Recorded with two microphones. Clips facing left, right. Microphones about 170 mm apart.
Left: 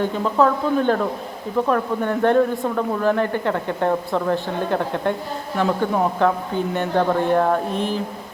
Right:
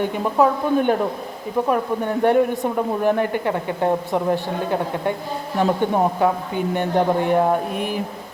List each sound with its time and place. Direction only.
0.0 s a woman's voice: 15° right (ahead or behind)